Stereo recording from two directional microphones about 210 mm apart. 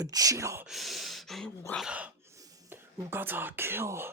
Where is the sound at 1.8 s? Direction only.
5° right (ahead or behind).